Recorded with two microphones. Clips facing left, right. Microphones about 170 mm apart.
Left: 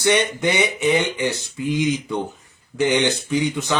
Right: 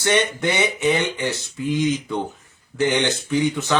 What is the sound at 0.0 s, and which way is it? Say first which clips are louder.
Speech: left 1 dB; 15° left (ahead or behind).